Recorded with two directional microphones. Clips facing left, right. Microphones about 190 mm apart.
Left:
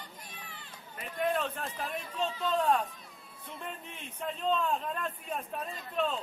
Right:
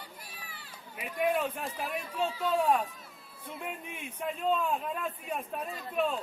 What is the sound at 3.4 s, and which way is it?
A man's voice, 10° right (ahead or behind).